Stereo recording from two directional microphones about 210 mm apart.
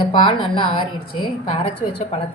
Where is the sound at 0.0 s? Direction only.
25° left (ahead or behind).